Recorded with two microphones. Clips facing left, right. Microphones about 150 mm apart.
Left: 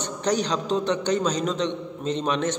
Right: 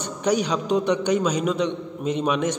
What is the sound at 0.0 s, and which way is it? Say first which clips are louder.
A man's voice: right 2 dB; 10° right (ahead or behind).